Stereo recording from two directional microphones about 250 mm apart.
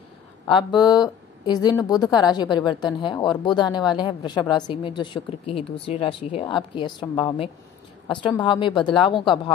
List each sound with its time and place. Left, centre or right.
0.5 s a woman's voice: centre